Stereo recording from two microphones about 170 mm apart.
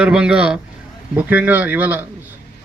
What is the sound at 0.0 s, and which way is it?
A man's voice, 5° right (ahead or behind).